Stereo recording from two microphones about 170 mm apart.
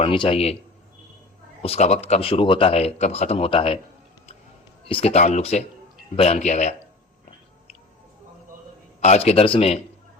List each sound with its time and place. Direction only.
0.0 s speech: 30° left (ahead or behind)
1.6 s speech: 40° left (ahead or behind)
4.9 s speech: 35° left (ahead or behind)
9.0 s speech: 40° left (ahead or behind)